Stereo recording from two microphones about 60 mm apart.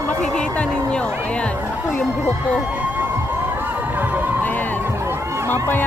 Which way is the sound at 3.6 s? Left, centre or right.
Right.